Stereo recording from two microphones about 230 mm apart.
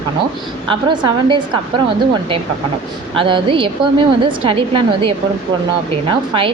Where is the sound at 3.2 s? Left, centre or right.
Right.